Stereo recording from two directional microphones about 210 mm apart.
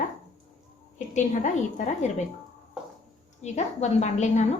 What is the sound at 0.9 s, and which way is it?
A woman's voice, 35° left (ahead or behind).